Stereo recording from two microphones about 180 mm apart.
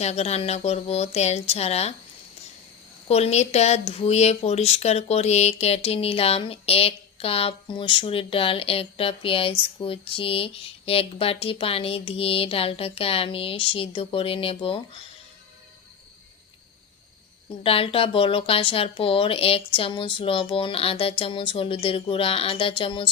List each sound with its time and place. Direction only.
0.0 s speech: 35° left (ahead or behind)
3.1 s speech: 35° left (ahead or behind)
17.6 s speech: 30° left (ahead or behind)